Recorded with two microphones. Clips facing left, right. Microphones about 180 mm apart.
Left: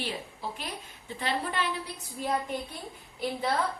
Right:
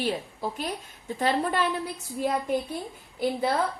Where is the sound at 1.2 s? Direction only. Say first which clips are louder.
Right 6 dB; 45° right (ahead or behind).